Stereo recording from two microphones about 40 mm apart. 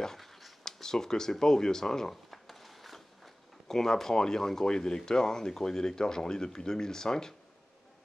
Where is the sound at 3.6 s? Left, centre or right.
Centre.